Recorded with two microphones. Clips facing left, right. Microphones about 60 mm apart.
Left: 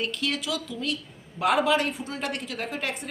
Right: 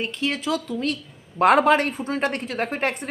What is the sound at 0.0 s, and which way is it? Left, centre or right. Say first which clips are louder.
A woman's voice: right 3 dB; right.